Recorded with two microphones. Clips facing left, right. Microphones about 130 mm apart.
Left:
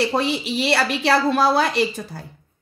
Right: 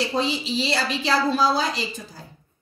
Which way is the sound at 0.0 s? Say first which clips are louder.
Left 3 dB; 60° left (ahead or behind).